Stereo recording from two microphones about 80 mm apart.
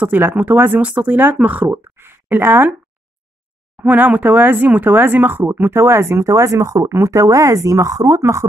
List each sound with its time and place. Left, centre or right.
0.0 s speech: right
3.8 s speech: centre; by 8.5 s right